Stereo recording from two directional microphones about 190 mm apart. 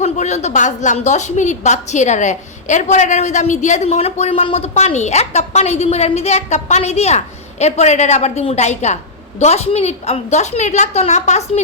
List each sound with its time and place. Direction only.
0.0 s a woman's voice: 35° left (ahead or behind)